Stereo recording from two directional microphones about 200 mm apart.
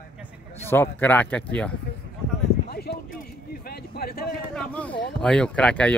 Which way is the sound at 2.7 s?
50° left (ahead or behind).